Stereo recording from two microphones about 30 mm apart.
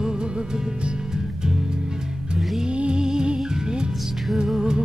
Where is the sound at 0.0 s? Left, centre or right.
Right.